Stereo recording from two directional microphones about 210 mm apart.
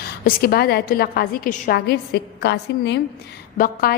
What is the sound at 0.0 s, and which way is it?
A woman's voice, 45° left (ahead or behind).